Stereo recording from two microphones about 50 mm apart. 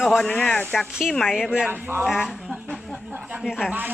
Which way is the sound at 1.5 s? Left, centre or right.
Centre.